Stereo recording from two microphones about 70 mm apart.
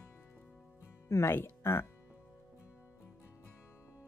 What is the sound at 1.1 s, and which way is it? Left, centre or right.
Speech, left.